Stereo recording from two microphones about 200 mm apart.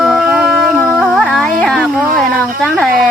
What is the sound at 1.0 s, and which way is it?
Music, 5° left (ahead or behind).